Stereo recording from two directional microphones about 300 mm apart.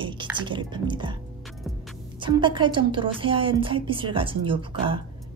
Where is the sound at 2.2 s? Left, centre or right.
Centre.